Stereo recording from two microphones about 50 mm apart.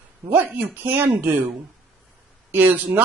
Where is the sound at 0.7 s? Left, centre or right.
Right.